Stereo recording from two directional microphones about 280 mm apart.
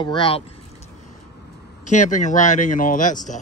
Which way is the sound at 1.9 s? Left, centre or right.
Left.